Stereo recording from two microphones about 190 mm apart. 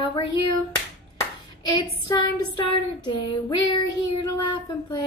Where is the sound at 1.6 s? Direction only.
20° left (ahead or behind).